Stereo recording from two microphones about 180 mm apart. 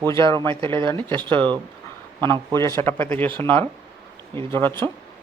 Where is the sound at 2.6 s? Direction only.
15° left (ahead or behind).